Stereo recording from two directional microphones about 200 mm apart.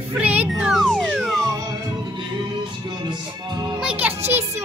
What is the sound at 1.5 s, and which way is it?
Music, 20° right (ahead or behind).